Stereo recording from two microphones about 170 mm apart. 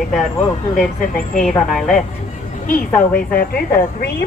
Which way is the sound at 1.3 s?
Centre (ahead or behind).